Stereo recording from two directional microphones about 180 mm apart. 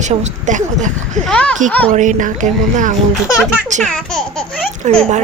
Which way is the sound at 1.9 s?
45° right (ahead or behind).